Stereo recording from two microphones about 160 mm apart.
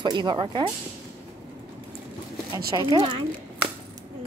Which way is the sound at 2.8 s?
25° right (ahead or behind).